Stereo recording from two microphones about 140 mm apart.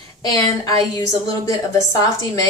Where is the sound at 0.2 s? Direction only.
30° left (ahead or behind).